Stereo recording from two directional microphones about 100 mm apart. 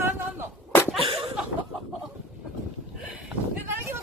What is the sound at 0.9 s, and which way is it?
Chuckle, 70° right (ahead or behind).